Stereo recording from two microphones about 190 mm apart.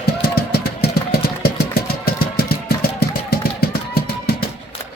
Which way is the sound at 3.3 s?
55° left (ahead or behind).